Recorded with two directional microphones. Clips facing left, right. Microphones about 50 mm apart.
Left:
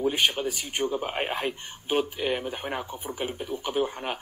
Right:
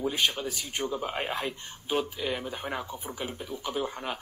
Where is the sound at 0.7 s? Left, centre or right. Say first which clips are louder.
Left 3 dB; centre.